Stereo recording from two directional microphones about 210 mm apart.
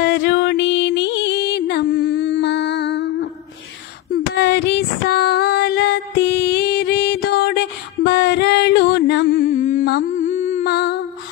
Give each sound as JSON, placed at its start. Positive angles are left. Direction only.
{"t": 0.0, "sound": "music", "side_deg": 55}
{"t": 4.1, "sound": "female singing", "side_deg": 50}
{"t": 10.2, "sound": "humming", "side_deg": 35}
{"t": 10.6, "sound": "humming", "side_deg": 50}